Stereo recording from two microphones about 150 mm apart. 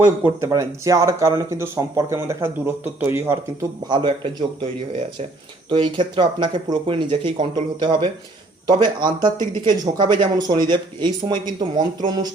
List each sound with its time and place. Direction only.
0.0 s speech: 15° right (ahead or behind)
3.8 s speech: 30° right (ahead or behind)
5.6 s speech: 30° right (ahead or behind)